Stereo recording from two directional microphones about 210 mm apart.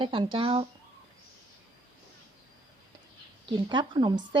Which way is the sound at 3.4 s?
20° right (ahead or behind).